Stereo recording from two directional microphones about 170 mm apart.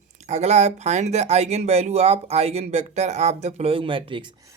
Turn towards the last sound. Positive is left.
turn(degrees=-30)  # may be behind; listen again after turning